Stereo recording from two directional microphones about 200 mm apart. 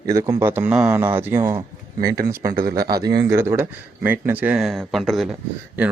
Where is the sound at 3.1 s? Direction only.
15° right (ahead or behind).